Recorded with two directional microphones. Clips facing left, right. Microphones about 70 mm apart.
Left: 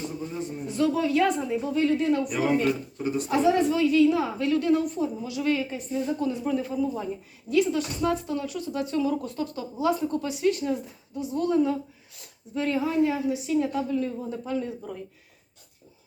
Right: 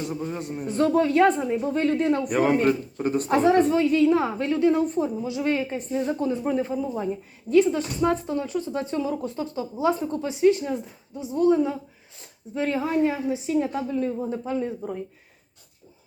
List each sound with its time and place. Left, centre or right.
0.1 s a man's voice: right